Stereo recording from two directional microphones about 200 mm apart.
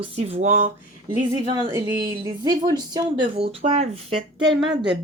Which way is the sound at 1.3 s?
20° right (ahead or behind).